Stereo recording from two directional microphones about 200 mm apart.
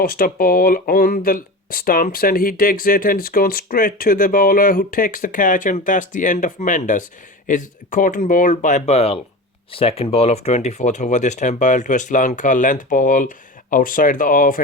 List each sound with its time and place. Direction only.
0.0 s speech: 45° left (ahead or behind)